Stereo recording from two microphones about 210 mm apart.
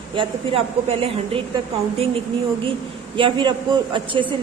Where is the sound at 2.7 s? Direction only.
25° right (ahead or behind).